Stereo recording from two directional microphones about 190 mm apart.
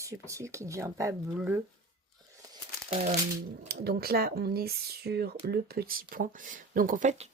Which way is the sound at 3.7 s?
55° right (ahead or behind).